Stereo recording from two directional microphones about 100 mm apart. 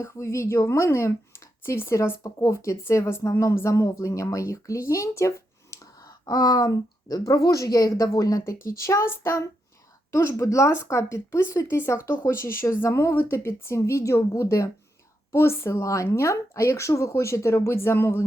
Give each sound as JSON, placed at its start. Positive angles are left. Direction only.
{"t": 0.0, "sound": "speech", "side_deg": 30}